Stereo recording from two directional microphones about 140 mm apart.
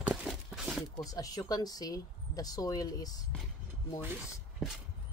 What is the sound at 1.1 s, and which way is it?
Speech, 25° left (ahead or behind).